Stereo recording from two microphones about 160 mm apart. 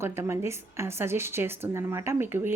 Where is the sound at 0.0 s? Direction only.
15° right (ahead or behind).